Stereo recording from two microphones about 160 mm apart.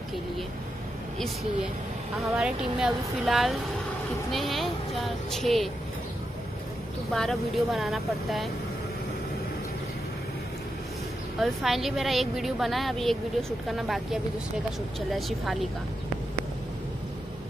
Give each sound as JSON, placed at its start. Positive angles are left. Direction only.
{"t": 2.3, "sound": "a woman's voice", "side_deg": -5}
{"t": 7.1, "sound": "a woman's voice", "side_deg": 0}
{"t": 11.3, "sound": "a woman's voice", "side_deg": 0}